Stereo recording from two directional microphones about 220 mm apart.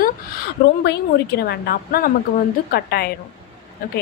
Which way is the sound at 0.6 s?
50° left (ahead or behind).